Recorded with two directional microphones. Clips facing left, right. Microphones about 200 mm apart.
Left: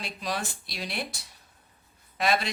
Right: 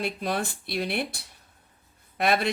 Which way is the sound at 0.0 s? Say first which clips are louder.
Right 5 dB; 55° right (ahead or behind).